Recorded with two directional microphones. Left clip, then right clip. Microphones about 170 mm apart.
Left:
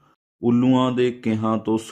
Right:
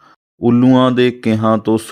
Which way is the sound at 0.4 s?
35° right (ahead or behind).